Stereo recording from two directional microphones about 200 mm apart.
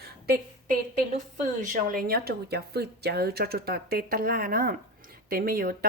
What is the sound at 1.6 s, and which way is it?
A woman's voice, 40° right (ahead or behind).